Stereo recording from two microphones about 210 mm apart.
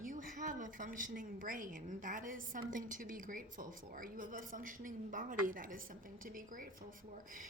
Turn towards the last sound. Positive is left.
turn(degrees=-40)  # may be behind; listen again after turning